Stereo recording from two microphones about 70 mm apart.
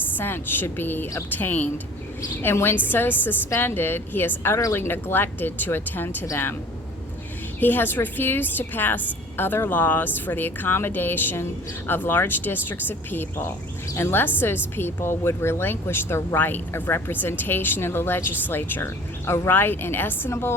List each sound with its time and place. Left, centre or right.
0.2 s a woman's voice: left
7.6 s a woman's voice: left
16.4 s speech: left